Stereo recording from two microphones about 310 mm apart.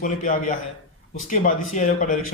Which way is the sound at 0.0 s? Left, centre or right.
Left.